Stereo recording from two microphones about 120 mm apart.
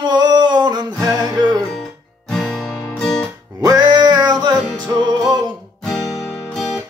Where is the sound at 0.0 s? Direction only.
35° right (ahead or behind).